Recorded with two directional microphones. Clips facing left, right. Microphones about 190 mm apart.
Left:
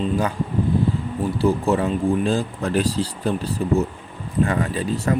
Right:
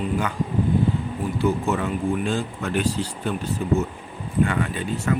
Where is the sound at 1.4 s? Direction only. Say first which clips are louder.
Left 3 dB; 35° left (ahead or behind).